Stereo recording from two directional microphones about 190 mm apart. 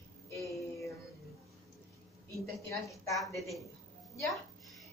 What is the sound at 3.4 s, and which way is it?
Speech, centre (ahead or behind).